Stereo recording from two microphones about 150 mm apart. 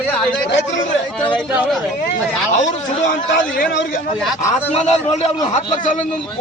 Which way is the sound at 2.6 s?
55° left (ahead or behind).